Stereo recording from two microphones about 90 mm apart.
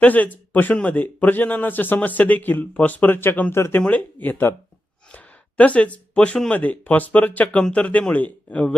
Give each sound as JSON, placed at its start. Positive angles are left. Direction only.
{"t": 0.0, "sound": "speech", "side_deg": 20}